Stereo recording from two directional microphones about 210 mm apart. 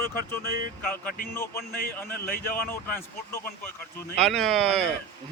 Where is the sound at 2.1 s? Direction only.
10° left (ahead or behind).